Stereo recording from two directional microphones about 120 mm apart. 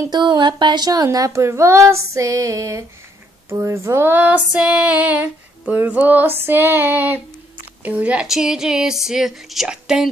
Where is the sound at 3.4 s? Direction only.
20° right (ahead or behind).